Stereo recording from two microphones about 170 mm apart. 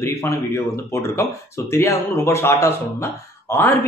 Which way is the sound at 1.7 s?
15° left (ahead or behind).